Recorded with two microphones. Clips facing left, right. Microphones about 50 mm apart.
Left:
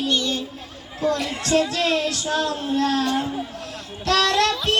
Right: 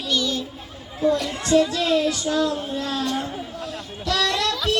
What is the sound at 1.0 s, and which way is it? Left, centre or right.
Speech, left.